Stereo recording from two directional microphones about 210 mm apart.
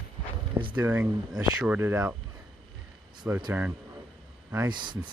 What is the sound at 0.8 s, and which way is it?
Speech, 5° right (ahead or behind).